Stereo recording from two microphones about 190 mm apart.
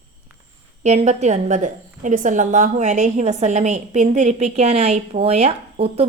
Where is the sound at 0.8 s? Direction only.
35° right (ahead or behind).